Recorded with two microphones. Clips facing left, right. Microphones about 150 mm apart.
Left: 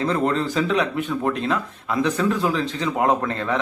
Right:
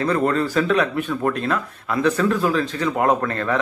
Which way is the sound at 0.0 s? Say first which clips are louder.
Right 2 dB; 20° left (ahead or behind).